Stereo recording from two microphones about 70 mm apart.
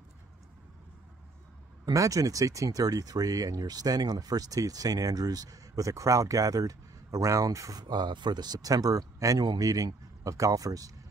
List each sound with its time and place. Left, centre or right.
1.9 s speech: right
7.8 s speech: right
9.4 s speech: right